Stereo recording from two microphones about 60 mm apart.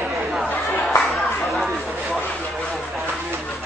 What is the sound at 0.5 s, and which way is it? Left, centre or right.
Chatter, left.